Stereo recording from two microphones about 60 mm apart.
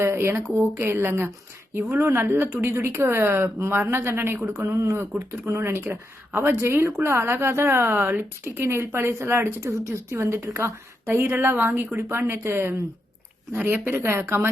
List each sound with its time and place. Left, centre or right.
0.0 s a woman's voice: right
11.9 s a woman's voice: right
13.7 s a woman's voice: right
14.0 s a woman's voice: right